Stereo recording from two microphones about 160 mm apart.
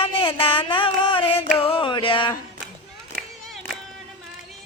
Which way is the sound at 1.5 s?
35° left (ahead or behind).